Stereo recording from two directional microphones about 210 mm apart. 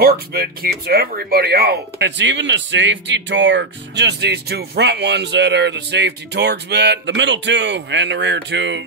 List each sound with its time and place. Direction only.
0.0 s speech: 45° right (ahead or behind)